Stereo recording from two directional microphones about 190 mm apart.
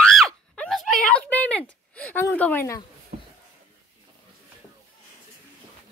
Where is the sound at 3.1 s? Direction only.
40° right (ahead or behind).